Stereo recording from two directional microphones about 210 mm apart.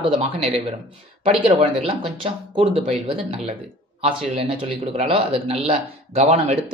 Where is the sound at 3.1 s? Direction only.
25° right (ahead or behind).